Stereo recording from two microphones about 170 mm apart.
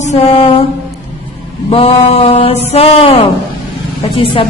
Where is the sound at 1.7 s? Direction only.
35° left (ahead or behind).